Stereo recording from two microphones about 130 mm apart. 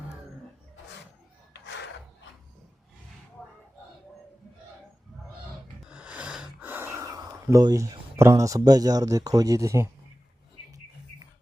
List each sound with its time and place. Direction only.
5.5 s gasp: 10° right (ahead or behind); by 7.9 s 30° right (ahead or behind)
8.2 s speech: 25° right (ahead or behind)